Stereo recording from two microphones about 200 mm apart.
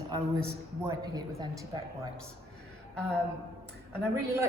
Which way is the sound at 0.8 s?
15° right (ahead or behind).